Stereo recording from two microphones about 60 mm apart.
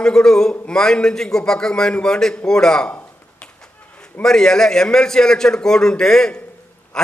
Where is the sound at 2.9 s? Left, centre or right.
Left.